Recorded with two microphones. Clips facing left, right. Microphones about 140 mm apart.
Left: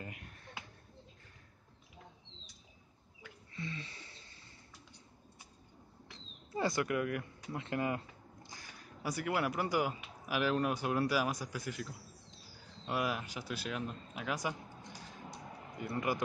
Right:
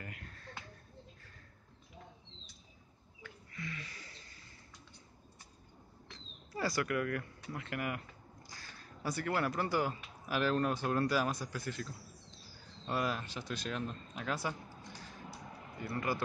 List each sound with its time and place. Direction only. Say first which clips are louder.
0.0 s finger snapping: left 1 dB; 20° left (ahead or behind)
3.5 s a sound: left 2 dB; 25° left (ahead or behind)
6.5 s speech: left 1 dB; 20° left (ahead or behind)